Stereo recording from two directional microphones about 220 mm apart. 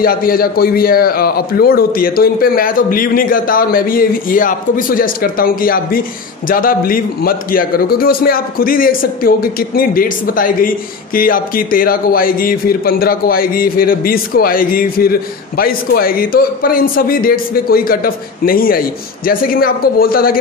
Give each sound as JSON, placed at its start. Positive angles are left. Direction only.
{"t": 0.0, "sound": "a man's voice", "side_deg": 40}